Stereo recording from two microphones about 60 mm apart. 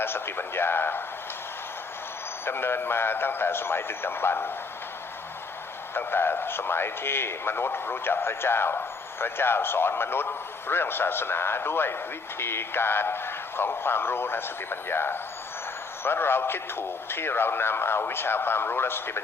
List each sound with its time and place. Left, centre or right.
0.0 s speech: left
2.4 s speech: left
5.9 s speech: left